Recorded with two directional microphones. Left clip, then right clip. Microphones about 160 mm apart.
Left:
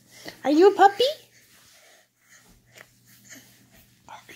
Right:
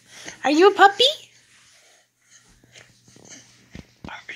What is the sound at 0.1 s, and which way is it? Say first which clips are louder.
Speech: right 2 dB; 10° left (ahead or behind).